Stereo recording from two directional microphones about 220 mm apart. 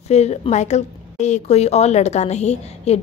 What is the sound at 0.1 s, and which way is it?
A woman's voice, 30° left (ahead or behind).